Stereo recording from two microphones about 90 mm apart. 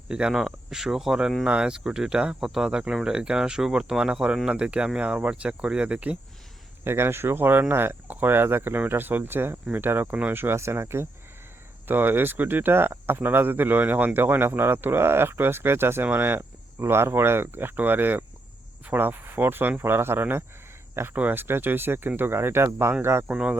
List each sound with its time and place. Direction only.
0.1 s speech: 10° right (ahead or behind)
6.8 s speech: 30° right (ahead or behind)